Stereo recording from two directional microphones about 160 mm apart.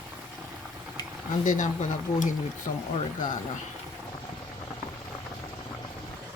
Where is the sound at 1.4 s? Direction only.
50° left (ahead or behind).